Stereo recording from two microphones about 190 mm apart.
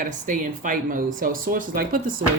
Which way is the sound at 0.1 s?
40° right (ahead or behind).